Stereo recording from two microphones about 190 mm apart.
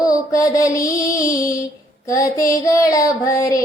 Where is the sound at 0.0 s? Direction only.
20° left (ahead or behind).